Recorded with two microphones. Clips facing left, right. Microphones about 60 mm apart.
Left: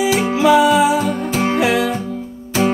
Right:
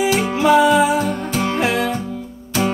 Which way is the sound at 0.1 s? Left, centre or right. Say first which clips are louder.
Left 2 dB; centre.